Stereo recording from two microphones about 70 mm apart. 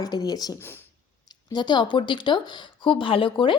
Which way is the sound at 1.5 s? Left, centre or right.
Left.